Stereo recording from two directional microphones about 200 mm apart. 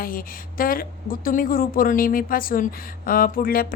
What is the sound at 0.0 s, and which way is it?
A woman's voice, 45° left (ahead or behind).